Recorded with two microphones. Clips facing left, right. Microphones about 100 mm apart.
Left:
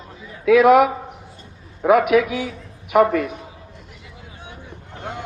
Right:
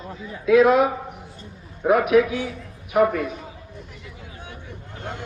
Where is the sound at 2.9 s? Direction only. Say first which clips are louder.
Left 3 dB; 90° left.